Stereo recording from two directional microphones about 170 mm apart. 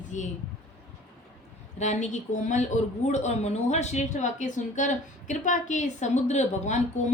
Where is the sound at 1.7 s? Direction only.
45° left (ahead or behind).